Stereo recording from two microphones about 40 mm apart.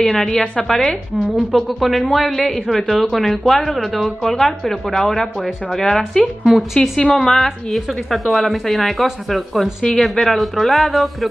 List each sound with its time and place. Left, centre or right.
0.0 s a woman's voice: centre
6.4 s speech: centre
6.8 s a woman's voice: left
7.2 s a woman's voice: centre